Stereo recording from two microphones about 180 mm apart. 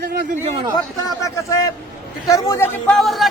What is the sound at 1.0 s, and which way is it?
A man's voice, 20° left (ahead or behind).